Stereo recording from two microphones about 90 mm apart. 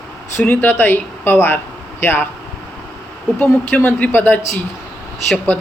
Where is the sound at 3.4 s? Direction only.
20° left (ahead or behind).